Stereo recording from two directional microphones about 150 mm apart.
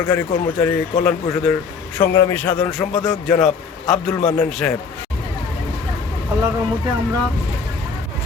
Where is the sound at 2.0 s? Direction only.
20° left (ahead or behind).